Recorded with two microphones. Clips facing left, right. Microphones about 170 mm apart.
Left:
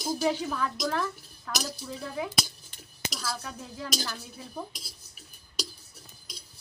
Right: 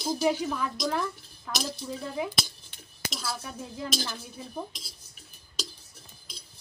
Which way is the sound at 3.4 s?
20° right (ahead or behind).